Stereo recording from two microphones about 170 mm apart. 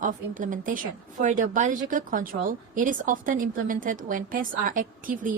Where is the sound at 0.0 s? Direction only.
50° right (ahead or behind).